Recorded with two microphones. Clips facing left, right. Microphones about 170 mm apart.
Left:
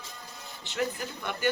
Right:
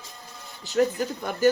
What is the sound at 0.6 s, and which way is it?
Speech, 40° right (ahead or behind).